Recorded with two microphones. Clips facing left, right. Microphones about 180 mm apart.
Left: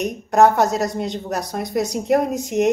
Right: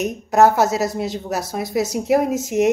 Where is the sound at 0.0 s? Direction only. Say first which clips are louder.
Even; 5° right (ahead or behind).